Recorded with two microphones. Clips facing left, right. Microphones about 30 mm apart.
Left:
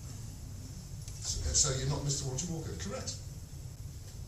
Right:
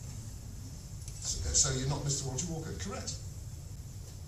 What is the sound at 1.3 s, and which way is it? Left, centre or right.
A man's voice, centre.